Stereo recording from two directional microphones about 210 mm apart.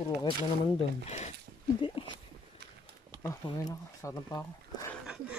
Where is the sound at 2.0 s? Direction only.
25° left (ahead or behind).